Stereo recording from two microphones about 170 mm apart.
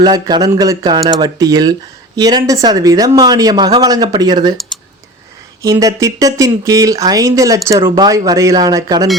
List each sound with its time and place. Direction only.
0.0 s speech: 25° right (ahead or behind)
5.6 s speech: 20° right (ahead or behind)